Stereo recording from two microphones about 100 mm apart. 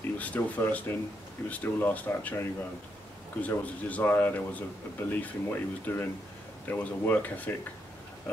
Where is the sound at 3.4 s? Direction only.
15° left (ahead or behind).